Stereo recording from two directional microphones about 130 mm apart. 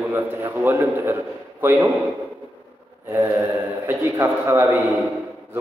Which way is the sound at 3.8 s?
20° right (ahead or behind).